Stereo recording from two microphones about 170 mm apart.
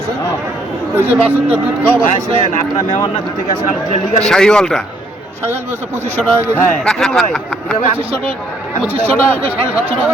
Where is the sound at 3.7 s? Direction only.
45° left (ahead or behind).